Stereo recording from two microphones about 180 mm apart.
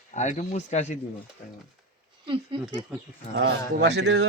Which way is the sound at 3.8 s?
75° right (ahead or behind).